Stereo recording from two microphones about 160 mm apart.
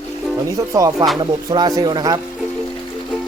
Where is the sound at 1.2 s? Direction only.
25° right (ahead or behind).